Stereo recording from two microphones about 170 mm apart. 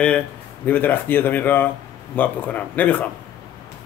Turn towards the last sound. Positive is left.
turn(degrees=10)  # may be behind; listen again after turning